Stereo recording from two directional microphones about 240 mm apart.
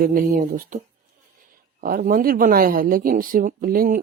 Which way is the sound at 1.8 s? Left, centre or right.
Right.